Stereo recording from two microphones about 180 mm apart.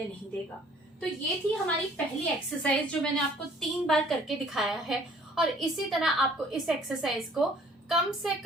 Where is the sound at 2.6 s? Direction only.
5° left (ahead or behind).